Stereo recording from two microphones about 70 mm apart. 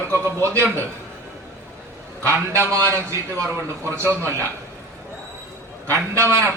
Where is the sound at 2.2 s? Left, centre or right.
Right.